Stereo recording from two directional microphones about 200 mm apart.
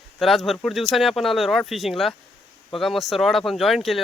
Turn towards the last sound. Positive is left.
turn(degrees=0)  # may be behind; listen again after turning